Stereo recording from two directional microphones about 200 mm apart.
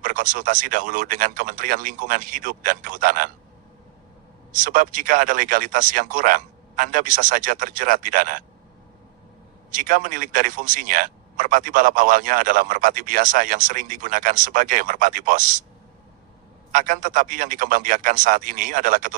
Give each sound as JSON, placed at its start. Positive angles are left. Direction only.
{"t": 0.0, "sound": "speech", "side_deg": -40}
{"t": 4.6, "sound": "speech", "side_deg": -40}
{"t": 9.7, "sound": "speech", "side_deg": -40}
{"t": 16.7, "sound": "speech", "side_deg": -40}